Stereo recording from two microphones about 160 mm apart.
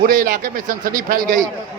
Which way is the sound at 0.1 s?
55° right (ahead or behind).